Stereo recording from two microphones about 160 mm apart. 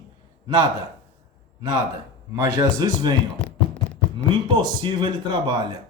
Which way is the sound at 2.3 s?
20° right (ahead or behind).